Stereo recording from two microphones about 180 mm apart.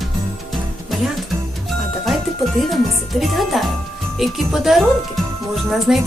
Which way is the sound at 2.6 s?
Centre (ahead or behind).